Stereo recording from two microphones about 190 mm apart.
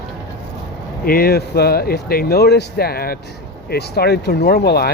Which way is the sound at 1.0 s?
50° left (ahead or behind).